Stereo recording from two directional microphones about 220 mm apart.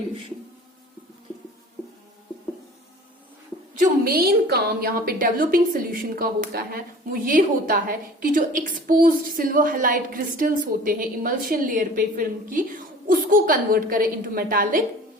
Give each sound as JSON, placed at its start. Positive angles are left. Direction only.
{"t": 3.8, "sound": "a woman's voice", "side_deg": -45}